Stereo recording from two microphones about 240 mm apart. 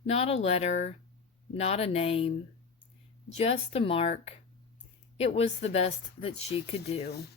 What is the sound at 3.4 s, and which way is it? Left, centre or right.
Speech, left.